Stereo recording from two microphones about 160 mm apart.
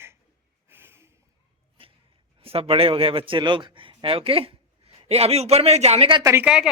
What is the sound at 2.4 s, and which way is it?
A man's voice, 35° right (ahead or behind).